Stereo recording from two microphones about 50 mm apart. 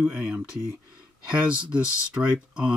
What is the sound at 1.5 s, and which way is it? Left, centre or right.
Speech, right.